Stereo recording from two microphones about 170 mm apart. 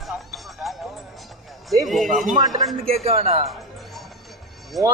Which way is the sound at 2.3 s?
25° right (ahead or behind).